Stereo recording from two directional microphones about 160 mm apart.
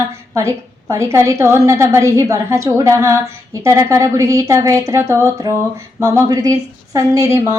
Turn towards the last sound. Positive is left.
turn(degrees=-20)  # may be behind; listen again after turning